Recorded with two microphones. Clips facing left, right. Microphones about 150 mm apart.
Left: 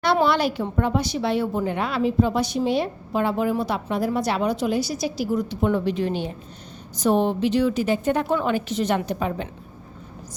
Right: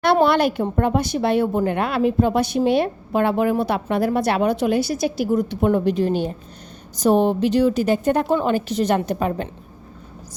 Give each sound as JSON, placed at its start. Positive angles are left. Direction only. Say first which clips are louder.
{"t": 0.0, "sound": "a woman's voice", "louder": "right 4 dB", "side_deg": -55}